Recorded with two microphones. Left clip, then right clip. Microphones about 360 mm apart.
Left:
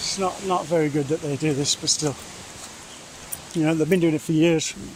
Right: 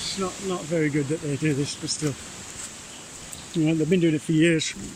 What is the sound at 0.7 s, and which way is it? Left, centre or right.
Speech, left.